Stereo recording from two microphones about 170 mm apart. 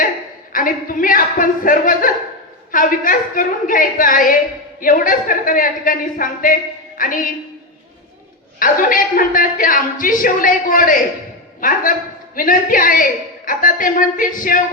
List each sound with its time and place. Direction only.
0.5 s a woman's voice: 55° left (ahead or behind)
8.5 s a woman's voice: 55° left (ahead or behind)